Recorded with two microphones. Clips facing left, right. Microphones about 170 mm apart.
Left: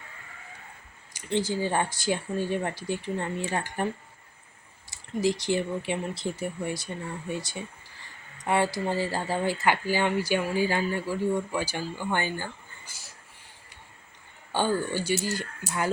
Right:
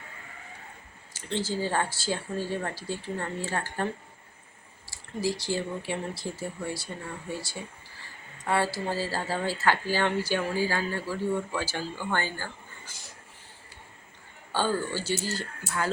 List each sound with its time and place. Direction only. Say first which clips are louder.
1.1 s speech: left 3 dB; 15° left (ahead or behind)
4.9 s speech: left 4 dB; 20° left (ahead or behind)
14.5 s speech: left 2 dB; 15° left (ahead or behind)